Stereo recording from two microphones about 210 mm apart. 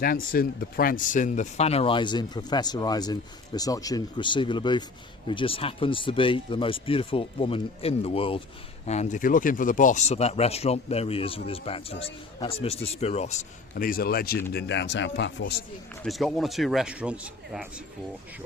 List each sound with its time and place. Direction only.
0.0 s speech: 45° left (ahead or behind)
16.0 s speech: centre (ahead or behind)